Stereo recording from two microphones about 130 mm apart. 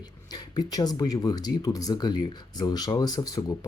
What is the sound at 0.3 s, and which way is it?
Speech, 30° left (ahead or behind).